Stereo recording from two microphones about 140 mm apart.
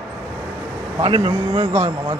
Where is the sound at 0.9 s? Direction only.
35° right (ahead or behind).